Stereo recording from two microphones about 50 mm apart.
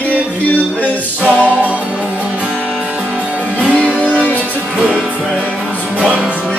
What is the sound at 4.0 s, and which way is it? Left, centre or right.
Music, left.